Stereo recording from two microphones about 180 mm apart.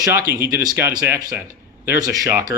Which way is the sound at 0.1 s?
15° right (ahead or behind).